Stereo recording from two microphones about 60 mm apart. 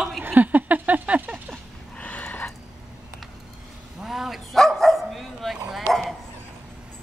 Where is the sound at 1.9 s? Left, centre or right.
Left.